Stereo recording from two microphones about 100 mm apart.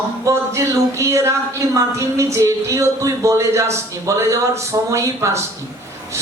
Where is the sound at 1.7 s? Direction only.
30° right (ahead or behind).